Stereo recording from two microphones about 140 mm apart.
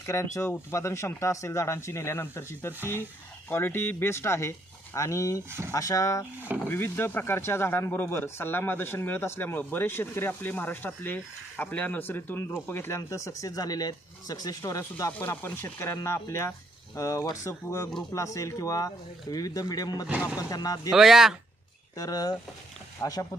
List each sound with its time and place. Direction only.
0.0 s speech: 20° left (ahead or behind)
5.5 s speech: 15° right (ahead or behind)
5.7 s speech: 25° left (ahead or behind)
20.9 s speech: centre (ahead or behind)
21.9 s speech: 25° left (ahead or behind)